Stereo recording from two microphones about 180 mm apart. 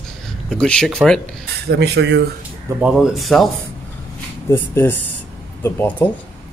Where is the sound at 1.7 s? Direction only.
70° right (ahead or behind).